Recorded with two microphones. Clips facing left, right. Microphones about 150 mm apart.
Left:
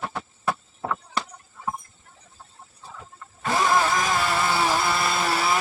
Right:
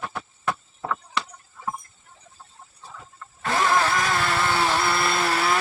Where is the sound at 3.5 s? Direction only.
10° left (ahead or behind).